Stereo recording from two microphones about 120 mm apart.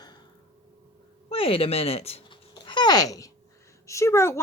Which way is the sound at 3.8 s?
25° left (ahead or behind).